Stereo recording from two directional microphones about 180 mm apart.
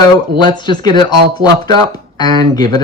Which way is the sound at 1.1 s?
60° right (ahead or behind).